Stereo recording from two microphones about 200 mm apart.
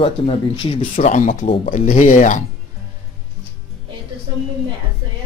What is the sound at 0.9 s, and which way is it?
Speech, 40° left (ahead or behind).